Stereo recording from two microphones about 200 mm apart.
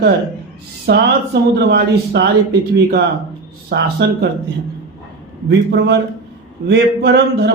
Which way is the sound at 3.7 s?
55° right (ahead or behind).